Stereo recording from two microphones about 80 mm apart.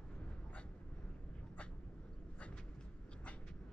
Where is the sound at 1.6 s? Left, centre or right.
Centre.